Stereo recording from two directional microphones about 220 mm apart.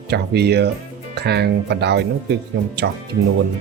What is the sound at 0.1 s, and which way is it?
A man's voice, 50° right (ahead or behind).